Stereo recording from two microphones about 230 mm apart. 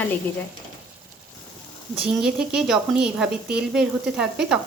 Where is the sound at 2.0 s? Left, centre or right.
Centre.